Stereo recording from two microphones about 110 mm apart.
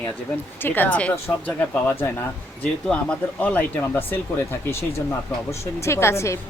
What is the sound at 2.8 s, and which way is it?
Speech, 10° left (ahead or behind).